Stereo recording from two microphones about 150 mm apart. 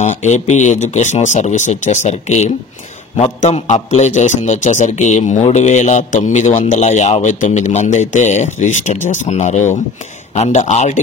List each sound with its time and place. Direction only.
0.0 s speech: 50° left (ahead or behind)